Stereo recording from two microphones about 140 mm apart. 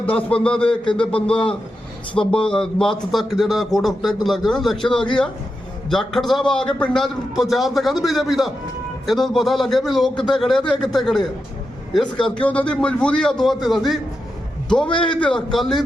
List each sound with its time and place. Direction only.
0.0 s a man's voice: 40° left (ahead or behind)
0.4 s a man's voice: 5° left (ahead or behind)
14.8 s a man's voice: 35° left (ahead or behind)
15.2 s a man's voice: 5° left (ahead or behind)